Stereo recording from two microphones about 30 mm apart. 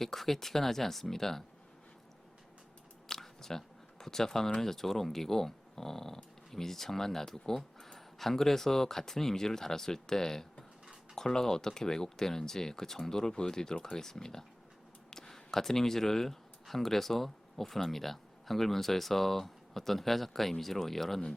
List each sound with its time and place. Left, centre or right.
0.0 s speech: centre
3.1 s camera: centre
4.0 s speech: centre